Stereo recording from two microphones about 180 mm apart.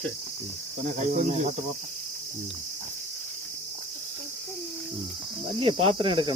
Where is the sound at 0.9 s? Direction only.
40° right (ahead or behind).